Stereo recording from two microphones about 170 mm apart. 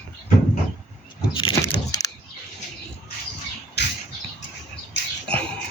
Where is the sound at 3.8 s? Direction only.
80° left.